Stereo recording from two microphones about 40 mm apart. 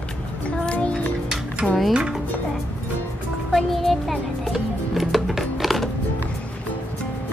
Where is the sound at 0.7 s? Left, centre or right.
Left.